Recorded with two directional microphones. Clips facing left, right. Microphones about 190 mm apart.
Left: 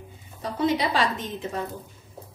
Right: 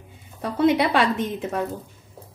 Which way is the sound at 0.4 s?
60° right (ahead or behind).